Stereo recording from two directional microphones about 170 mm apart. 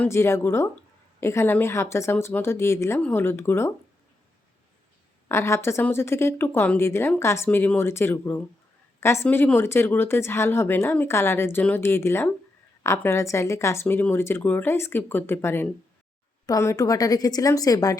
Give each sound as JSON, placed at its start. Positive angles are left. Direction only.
{"t": 0.0, "sound": "speech", "side_deg": 15}
{"t": 5.3, "sound": "a woman's voice", "side_deg": 15}